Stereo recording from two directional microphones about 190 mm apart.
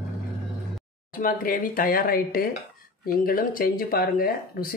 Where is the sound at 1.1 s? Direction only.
45° left (ahead or behind).